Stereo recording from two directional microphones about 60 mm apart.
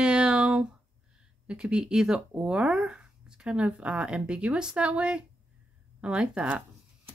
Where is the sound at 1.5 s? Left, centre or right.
Centre.